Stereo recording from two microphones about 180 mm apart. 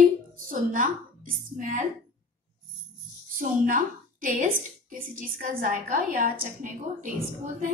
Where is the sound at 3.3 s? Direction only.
50° right (ahead or behind).